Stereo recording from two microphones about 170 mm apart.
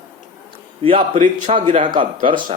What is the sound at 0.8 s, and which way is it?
A man's voice, 35° right (ahead or behind).